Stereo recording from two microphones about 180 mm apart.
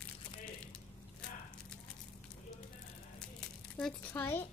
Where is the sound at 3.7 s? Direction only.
10° left (ahead or behind).